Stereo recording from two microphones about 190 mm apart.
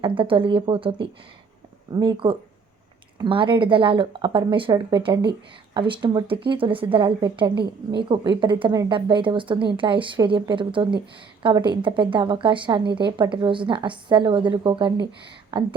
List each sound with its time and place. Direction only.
0.0 s a woman's voice: 25° right (ahead or behind)